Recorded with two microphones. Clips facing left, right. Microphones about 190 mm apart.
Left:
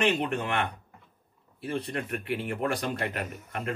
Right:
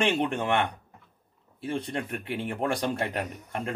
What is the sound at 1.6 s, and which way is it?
A man's voice, 30° right (ahead or behind).